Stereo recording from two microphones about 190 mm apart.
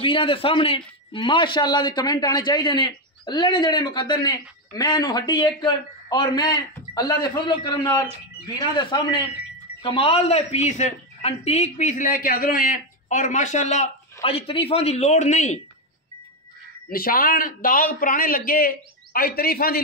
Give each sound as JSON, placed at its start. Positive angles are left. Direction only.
{"t": 0.0, "sound": "a man's voice", "side_deg": 25}
{"t": 16.9, "sound": "a man's voice", "side_deg": 50}